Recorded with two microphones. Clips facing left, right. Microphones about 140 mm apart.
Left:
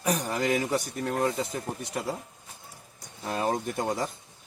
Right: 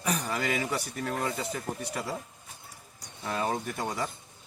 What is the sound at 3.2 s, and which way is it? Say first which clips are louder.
Speech: left 2 dB; 30° left (ahead or behind).